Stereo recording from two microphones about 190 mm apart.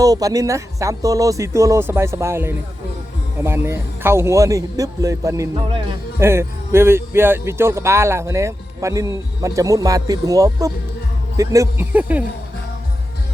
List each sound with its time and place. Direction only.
0.0 s speech: 20° right (ahead or behind)
5.5 s speech: 25° right (ahead or behind)
6.1 s speech: 15° right (ahead or behind)